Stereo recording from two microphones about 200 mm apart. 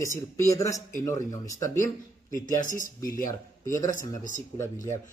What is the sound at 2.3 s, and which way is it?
Speech, 40° left (ahead or behind).